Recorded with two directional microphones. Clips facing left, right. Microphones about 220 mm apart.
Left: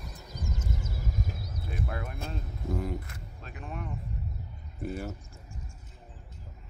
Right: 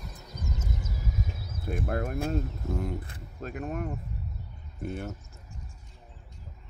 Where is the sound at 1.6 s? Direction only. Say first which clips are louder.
Right 7 dB; 45° right (ahead or behind).